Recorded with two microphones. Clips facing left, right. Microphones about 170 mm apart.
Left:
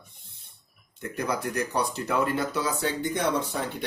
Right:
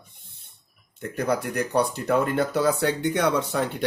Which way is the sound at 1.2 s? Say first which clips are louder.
Right 4 dB; 60° right (ahead or behind).